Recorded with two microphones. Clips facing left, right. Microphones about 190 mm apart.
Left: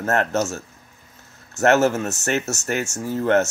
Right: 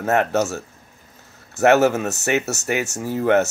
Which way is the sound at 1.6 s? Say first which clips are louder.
Right 2 dB; 10° right (ahead or behind).